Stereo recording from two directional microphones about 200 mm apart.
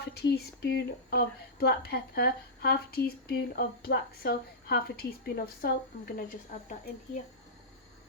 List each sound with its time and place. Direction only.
0.0 s speech: 55° left (ahead or behind)